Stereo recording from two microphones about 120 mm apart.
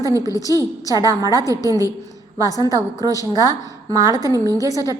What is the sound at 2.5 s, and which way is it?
A woman's voice, 30° left (ahead or behind).